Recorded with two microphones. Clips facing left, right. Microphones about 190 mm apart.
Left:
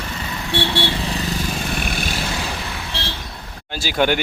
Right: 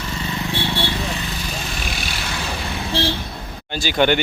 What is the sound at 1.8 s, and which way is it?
Vehicle, 50° left (ahead or behind).